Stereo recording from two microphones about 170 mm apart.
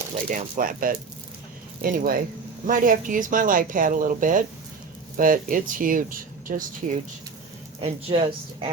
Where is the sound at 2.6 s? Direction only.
50° right (ahead or behind).